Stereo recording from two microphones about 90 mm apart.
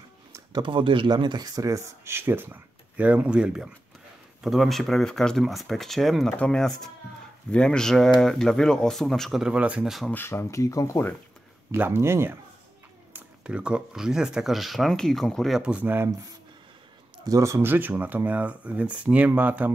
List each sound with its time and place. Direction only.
0.5 s speech: 65° right (ahead or behind); by 9.4 s 5° left (ahead or behind)
9.4 s speech: 15° right (ahead or behind)
10.1 s speech: 25° left (ahead or behind)
11.7 s speech: 20° right (ahead or behind)
13.1 s speech: 10° right (ahead or behind); by 15.6 s 5° left (ahead or behind)
15.6 s speech: 15° right (ahead or behind)
17.3 s speech: 35° right (ahead or behind); by 19.7 s 20° right (ahead or behind)